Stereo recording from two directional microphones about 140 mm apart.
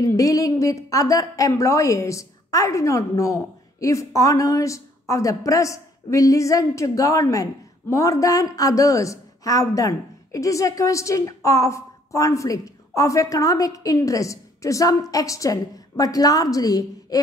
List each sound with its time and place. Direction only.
0.0 s a woman's voice: 25° left (ahead or behind)